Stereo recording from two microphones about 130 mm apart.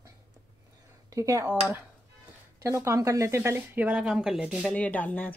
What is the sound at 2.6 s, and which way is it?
Speech, 20° right (ahead or behind).